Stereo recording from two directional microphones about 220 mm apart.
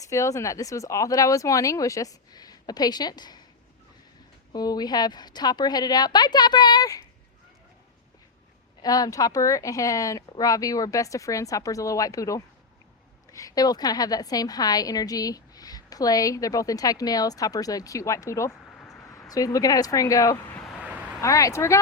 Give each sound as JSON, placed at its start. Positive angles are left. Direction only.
{"t": 0.0, "sound": "a woman's voice", "side_deg": 15}
{"t": 4.5, "sound": "a woman's voice", "side_deg": 20}
{"t": 8.8, "sound": "a woman's voice", "side_deg": 15}
{"t": 19.3, "sound": "speech", "side_deg": 15}
{"t": 21.2, "sound": "a woman's voice", "side_deg": 15}